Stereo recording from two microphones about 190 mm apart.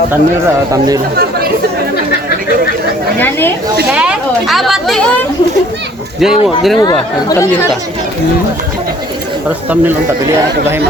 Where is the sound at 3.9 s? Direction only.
5° right (ahead or behind).